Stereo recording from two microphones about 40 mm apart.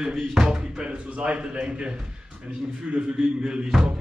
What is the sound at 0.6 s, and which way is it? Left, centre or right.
Speech, right.